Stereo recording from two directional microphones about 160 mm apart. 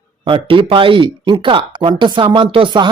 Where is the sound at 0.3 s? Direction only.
30° right (ahead or behind).